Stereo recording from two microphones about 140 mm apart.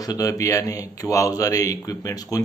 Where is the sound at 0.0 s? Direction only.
25° left (ahead or behind).